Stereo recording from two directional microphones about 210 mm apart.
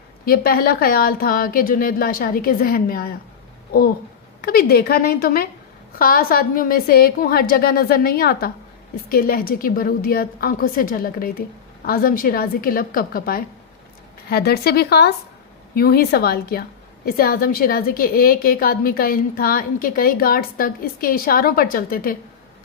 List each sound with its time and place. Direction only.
0.3 s a woman's voice: 45° left (ahead or behind)